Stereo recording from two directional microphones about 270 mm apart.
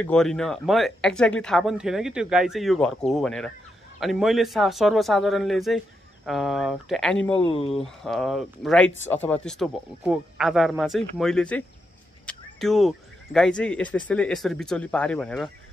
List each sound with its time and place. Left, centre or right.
0.0 s speech: centre
7.4 s speech: left
8.0 s speech: centre